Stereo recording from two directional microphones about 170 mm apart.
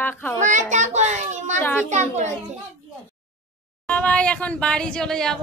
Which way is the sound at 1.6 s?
10° left (ahead or behind).